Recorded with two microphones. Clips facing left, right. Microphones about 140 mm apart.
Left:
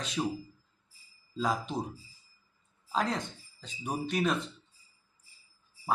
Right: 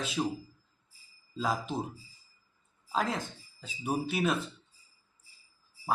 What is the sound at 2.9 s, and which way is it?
Speech, 5° right (ahead or behind).